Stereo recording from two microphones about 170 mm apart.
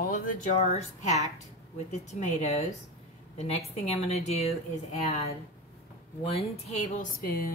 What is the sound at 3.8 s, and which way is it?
A woman's voice, 40° left (ahead or behind).